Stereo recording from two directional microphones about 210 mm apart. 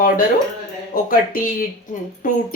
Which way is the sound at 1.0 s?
40° left (ahead or behind).